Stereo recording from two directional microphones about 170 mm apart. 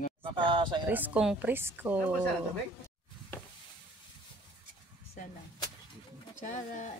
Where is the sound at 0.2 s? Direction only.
30° right (ahead or behind).